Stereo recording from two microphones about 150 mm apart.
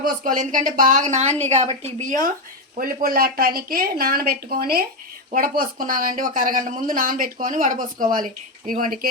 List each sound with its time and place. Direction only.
0.0 s speech: 60° right (ahead or behind)
2.7 s speech: 75° right (ahead or behind); by 4.9 s 90° right
5.3 s speech: 70° right (ahead or behind)